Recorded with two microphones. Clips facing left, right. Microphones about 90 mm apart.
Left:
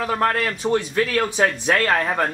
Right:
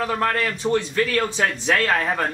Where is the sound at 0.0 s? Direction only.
5° left (ahead or behind).